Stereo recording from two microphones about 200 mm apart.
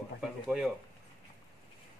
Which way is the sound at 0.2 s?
Centre (ahead or behind).